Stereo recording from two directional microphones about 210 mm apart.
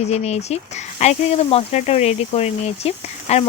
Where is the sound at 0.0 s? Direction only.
30° left (ahead or behind).